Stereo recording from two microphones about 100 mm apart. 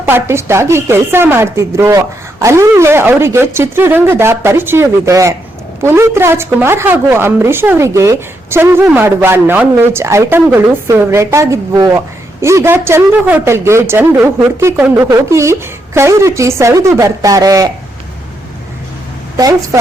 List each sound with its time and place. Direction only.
0.0 s a woman's voice: 25° right (ahead or behind)
19.4 s a woman's voice: 35° right (ahead or behind)